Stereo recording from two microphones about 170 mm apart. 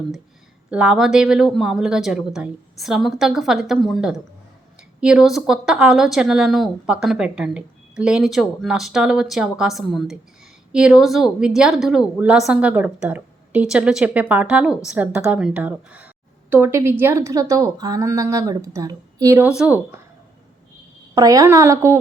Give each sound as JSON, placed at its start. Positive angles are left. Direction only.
{"t": 0.7, "sound": "a woman's voice", "side_deg": -5}
{"t": 19.5, "sound": "a woman's voice", "side_deg": -5}
{"t": 21.2, "sound": "a woman's voice", "side_deg": -20}